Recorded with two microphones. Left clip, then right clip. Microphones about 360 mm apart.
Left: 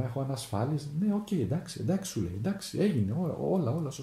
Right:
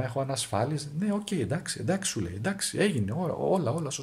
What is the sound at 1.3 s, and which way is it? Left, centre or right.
Speech, right.